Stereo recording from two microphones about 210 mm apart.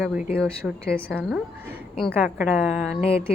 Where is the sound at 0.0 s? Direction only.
5° right (ahead or behind).